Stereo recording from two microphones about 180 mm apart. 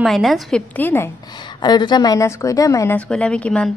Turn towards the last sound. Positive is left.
turn(degrees=5)  # may be behind; listen again after turning